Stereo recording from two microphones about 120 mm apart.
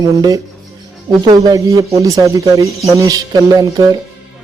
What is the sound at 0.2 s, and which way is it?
Speech, 30° right (ahead or behind).